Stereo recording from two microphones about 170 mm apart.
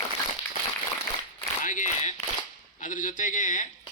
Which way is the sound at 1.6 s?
50° left (ahead or behind).